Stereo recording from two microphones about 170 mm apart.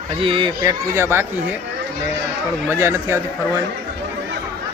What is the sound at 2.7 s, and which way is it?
Speech, 15° right (ahead or behind).